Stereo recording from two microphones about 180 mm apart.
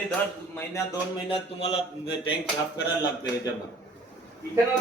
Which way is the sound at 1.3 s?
30° left (ahead or behind).